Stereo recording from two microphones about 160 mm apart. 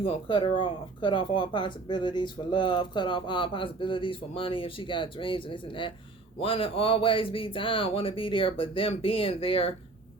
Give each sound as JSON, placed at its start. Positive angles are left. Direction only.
{"t": 0.0, "sound": "speech", "side_deg": 30}